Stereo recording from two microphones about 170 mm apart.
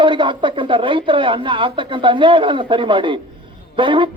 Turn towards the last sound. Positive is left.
turn(degrees=-30)  # may be behind; listen again after turning